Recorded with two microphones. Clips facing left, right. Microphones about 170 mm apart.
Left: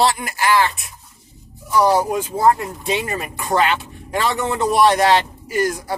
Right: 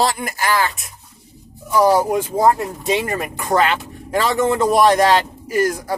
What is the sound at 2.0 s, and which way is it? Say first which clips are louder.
Speech: right 1 dB; 45° right (ahead or behind).